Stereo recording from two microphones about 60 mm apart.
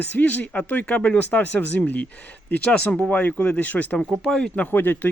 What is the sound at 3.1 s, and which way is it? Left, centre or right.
Speech, left.